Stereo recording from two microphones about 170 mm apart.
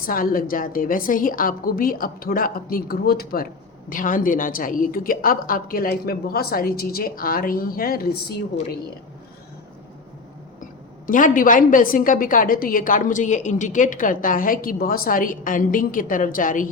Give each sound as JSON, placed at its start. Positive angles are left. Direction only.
{"t": 0.0, "sound": "a woman's voice", "side_deg": 55}
{"t": 11.0, "sound": "a woman's voice", "side_deg": 55}